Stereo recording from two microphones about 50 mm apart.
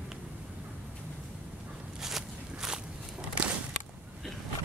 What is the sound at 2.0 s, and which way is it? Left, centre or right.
Walk, centre.